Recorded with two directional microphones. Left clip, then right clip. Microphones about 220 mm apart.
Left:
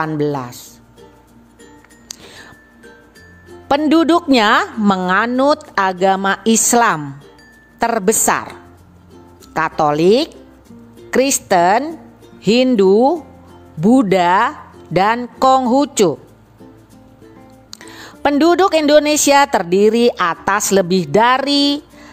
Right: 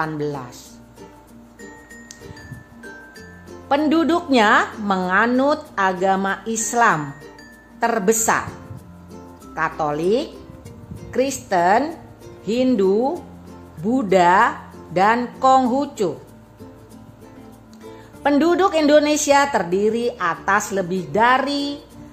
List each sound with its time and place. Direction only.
0.0 s a man's voice: 30° left (ahead or behind)
3.6 s a woman's voice: 45° left (ahead or behind)
9.5 s a woman's voice: 45° left (ahead or behind)
18.2 s a woman's voice: 45° left (ahead or behind)